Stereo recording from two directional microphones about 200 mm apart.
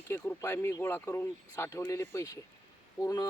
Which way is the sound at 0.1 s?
10° left (ahead or behind).